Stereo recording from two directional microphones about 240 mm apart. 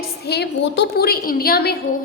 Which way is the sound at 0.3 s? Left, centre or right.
Left.